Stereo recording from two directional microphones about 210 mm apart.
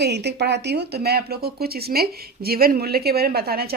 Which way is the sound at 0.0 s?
50° right (ahead or behind).